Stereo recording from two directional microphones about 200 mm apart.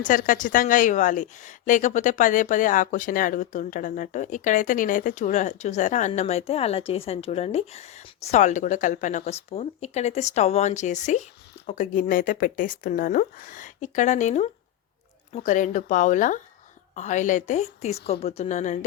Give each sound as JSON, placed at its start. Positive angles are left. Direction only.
{"t": 0.0, "sound": "a woman's voice", "side_deg": 40}